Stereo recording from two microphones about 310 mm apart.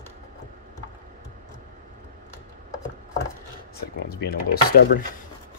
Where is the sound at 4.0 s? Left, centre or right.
Left.